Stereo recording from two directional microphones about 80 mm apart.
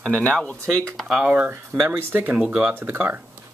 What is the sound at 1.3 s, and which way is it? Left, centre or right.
Speech, right.